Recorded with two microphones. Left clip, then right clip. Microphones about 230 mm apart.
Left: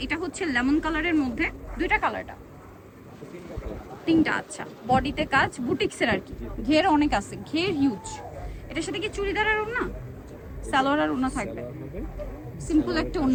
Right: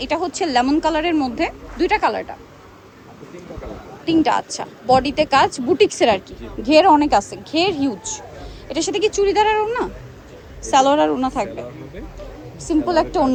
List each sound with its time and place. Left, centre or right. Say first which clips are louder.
0.0 s speech: right 8 dB; centre
4.0 s speech: right 6 dB; centre
12.6 s speech: right 8 dB; centre